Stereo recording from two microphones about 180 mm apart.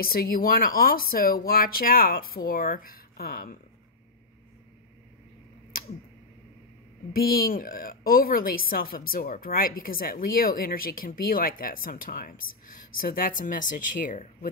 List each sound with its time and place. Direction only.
0.0 s speech: 55° left (ahead or behind)
7.2 s a woman's voice: 55° left (ahead or behind)